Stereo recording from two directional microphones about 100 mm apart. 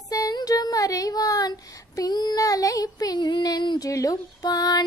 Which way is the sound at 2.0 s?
40° left (ahead or behind).